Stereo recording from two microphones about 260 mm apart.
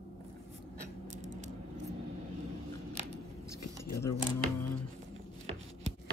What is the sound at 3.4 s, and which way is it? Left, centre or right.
Keys jangling, left.